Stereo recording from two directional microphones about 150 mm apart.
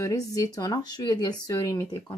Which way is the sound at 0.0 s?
20° left (ahead or behind).